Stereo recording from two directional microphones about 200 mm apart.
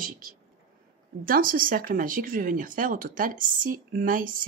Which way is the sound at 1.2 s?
45° right (ahead or behind).